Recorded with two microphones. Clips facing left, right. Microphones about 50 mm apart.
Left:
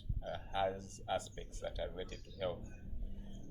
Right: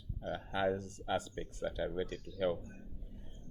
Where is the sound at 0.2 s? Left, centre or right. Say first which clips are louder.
Right 2 dB; right.